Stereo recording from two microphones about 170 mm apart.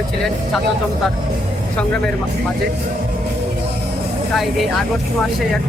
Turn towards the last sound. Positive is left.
turn(degrees=0)  # may be behind; listen again after turning